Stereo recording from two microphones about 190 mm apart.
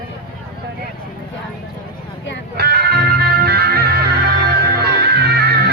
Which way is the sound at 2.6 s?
55° right (ahead or behind).